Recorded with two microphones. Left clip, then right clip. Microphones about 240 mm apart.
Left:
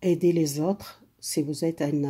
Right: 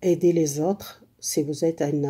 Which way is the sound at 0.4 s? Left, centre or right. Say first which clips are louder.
Right 3 dB; left.